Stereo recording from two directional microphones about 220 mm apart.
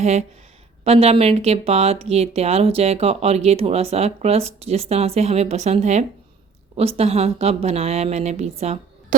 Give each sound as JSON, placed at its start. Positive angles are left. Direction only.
{"t": 0.0, "sound": "speech", "side_deg": -30}